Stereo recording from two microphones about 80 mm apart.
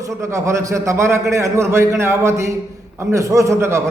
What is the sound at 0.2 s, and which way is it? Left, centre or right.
A man's voice, right.